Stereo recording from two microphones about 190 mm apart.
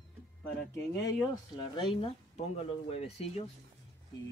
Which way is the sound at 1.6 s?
25° left (ahead or behind).